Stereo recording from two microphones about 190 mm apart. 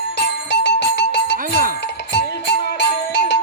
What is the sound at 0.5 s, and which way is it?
Music, 65° left (ahead or behind).